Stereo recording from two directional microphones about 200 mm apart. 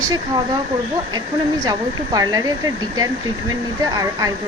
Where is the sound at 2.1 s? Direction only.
20° right (ahead or behind).